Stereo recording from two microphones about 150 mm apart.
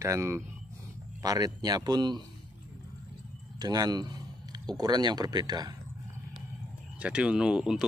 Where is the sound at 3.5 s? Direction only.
25° right (ahead or behind).